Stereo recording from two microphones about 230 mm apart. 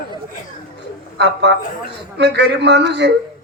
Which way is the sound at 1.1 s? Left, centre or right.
Right.